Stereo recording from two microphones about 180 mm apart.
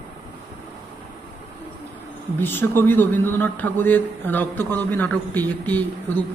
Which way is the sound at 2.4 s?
10° left (ahead or behind).